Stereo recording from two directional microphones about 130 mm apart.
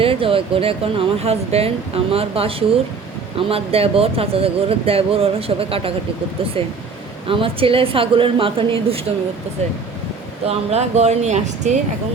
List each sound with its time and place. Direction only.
0.0 s speech: 45° right (ahead or behind)
7.3 s speech: 45° right (ahead or behind)
10.4 s speech: 55° right (ahead or behind)